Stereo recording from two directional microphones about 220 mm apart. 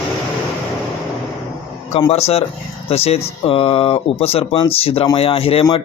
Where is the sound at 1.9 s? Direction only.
25° left (ahead or behind).